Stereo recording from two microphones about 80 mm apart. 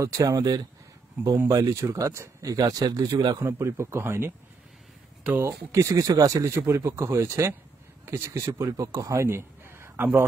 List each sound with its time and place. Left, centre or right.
0.0 s speech: right
3.3 s speech: right
5.7 s speech: right
6.5 s a man's voice: right